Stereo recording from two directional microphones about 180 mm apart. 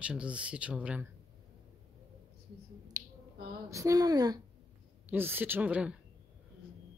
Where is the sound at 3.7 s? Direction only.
15° right (ahead or behind).